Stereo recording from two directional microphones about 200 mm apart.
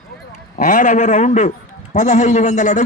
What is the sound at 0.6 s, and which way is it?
A man's voice, 40° left (ahead or behind).